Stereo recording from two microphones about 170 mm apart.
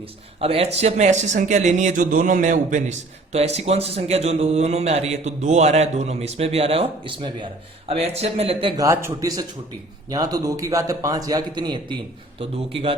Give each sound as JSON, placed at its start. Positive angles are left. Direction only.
{"t": 0.3, "sound": "a man's voice", "side_deg": -35}
{"t": 8.7, "sound": "a man's voice", "side_deg": -20}